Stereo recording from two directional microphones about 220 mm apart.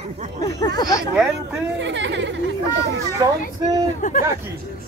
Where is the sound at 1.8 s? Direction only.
55° right (ahead or behind).